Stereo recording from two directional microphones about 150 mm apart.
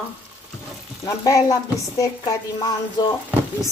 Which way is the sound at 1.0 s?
20° left (ahead or behind).